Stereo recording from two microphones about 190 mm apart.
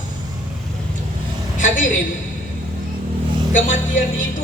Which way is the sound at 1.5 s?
40° left (ahead or behind).